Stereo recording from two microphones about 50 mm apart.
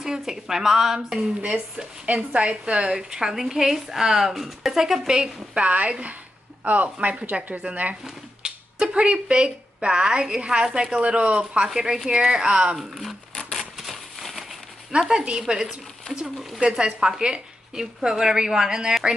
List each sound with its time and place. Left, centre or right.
0.0 s a woman's voice: centre; by 8.0 s right
8.0 s a woman's voice: centre
12.7 s speech: centre
13.3 s a sound: centre
13.6 s a sound: centre
14.9 s a woman's voice: centre